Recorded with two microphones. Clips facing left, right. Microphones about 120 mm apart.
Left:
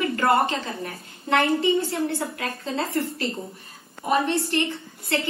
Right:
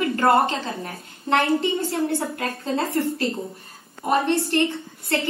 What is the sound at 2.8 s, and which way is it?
Speech, centre (ahead or behind).